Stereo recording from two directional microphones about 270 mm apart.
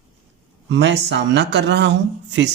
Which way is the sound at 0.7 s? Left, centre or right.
Right.